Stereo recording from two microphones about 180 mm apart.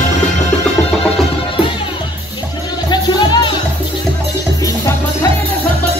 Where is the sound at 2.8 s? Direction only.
25° left (ahead or behind).